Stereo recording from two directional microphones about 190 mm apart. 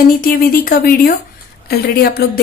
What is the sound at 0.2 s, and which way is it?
A woman's voice, 50° left (ahead or behind).